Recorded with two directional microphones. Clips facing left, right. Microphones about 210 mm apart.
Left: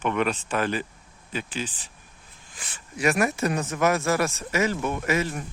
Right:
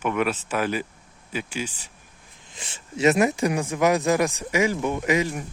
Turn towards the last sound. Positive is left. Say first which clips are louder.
# right 3 dB
turn(degrees=-15)  # may be behind; listen again after turning